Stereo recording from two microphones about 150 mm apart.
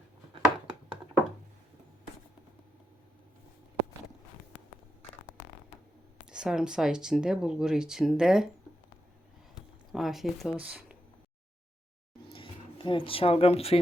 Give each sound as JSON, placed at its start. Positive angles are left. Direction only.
{"t": 0.4, "sound": "a sound", "side_deg": -30}
{"t": 6.3, "sound": "speech", "side_deg": -5}
{"t": 9.9, "sound": "speech", "side_deg": 0}
{"t": 12.3, "sound": "speech", "side_deg": 35}